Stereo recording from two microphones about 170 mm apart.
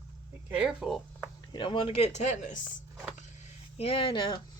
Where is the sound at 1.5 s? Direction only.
30° left (ahead or behind); by 2.6 s 45° left (ahead or behind).